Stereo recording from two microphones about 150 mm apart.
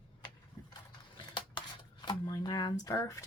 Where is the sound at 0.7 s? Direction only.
30° left (ahead or behind).